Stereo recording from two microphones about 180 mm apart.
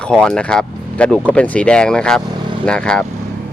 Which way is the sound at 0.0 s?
5° left (ahead or behind).